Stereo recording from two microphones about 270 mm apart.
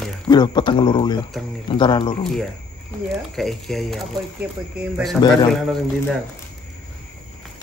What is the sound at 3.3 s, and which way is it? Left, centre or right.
Speech, centre.